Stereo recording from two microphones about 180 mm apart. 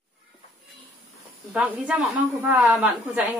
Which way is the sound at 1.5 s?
5° right (ahead or behind).